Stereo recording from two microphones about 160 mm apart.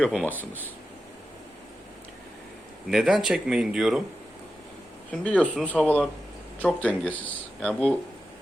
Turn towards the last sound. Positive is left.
turn(degrees=5)  # may be behind; listen again after turning